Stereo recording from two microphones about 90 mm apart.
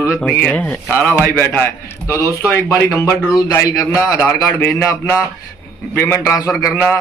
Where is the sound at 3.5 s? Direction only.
40° left (ahead or behind).